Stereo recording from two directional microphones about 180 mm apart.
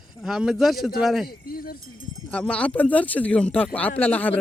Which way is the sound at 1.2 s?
55° left (ahead or behind).